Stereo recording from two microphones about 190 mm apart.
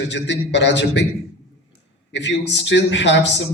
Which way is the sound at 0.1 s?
65° left (ahead or behind).